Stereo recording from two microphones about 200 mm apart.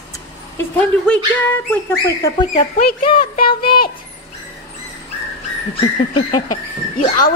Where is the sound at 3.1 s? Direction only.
25° left (ahead or behind).